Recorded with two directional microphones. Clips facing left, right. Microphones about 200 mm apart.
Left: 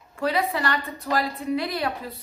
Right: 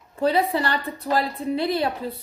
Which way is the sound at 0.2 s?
30° right (ahead or behind).